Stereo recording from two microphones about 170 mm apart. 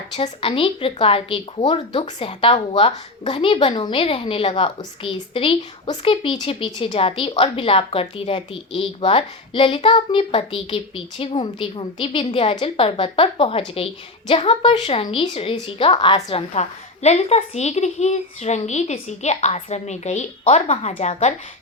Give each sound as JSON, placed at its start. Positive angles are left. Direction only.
{"t": 0.2, "sound": "speech", "side_deg": 35}